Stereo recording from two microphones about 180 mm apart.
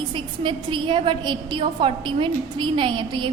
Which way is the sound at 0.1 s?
25° right (ahead or behind).